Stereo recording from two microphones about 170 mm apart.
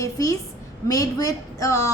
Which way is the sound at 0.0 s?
20° left (ahead or behind).